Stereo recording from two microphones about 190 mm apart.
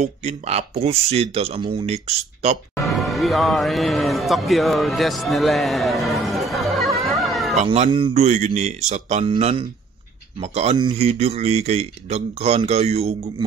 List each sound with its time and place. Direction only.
0.0 s speech: 35° right (ahead or behind)
2.8 s speech: centre (ahead or behind)
7.5 s speech: 35° right (ahead or behind)